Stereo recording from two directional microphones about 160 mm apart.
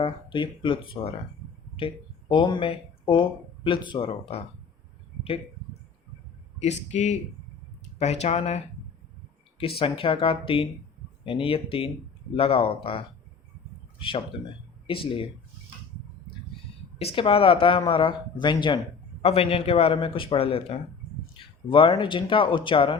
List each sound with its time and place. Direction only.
0.0 s speech: 30° left (ahead or behind)
2.3 s speech: 30° left (ahead or behind)
6.6 s speech: 45° left (ahead or behind)
14.8 s speech: 35° left (ahead or behind)
17.0 s speech: 35° left (ahead or behind)